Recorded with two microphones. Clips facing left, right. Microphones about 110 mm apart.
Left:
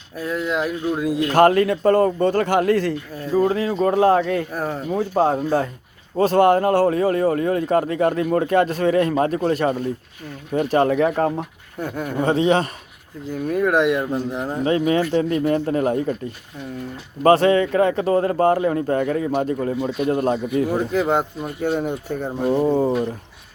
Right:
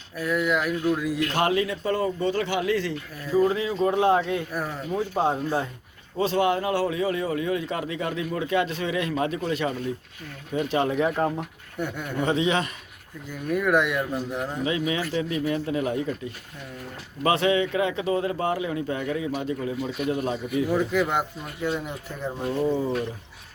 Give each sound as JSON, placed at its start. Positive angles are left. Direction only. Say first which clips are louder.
{"t": 0.2, "sound": "speech", "louder": "left 1 dB", "side_deg": 30}
{"t": 1.3, "sound": "a man's voice", "louder": "left 12 dB", "side_deg": 50}
{"t": 6.1, "sound": "a man's voice", "louder": "left 8 dB", "side_deg": 45}
{"t": 11.3, "sound": "speech", "louder": "left 3 dB", "side_deg": 35}
{"t": 17.2, "sound": "a man's voice", "louder": "left 7 dB", "side_deg": 40}
{"t": 21.8, "sound": "speech", "louder": "left 9 dB", "side_deg": 60}
{"t": 22.4, "sound": "speech", "louder": "left 7 dB", "side_deg": 30}